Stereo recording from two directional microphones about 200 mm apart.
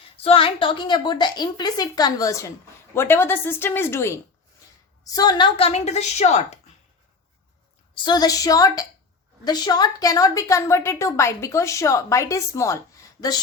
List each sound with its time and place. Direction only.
0.2 s a woman's voice: 25° left (ahead or behind)
7.9 s a woman's voice: 20° left (ahead or behind)